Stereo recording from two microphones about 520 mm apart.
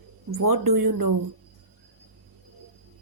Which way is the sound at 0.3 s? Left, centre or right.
Right.